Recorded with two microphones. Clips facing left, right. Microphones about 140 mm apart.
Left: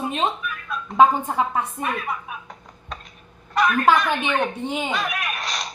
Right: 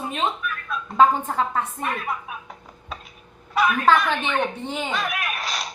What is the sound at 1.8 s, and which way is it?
Speech, centre (ahead or behind).